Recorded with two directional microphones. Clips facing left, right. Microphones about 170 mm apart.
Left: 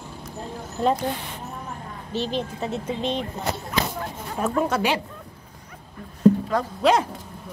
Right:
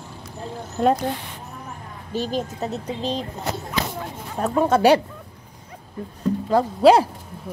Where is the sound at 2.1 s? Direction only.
45° right (ahead or behind).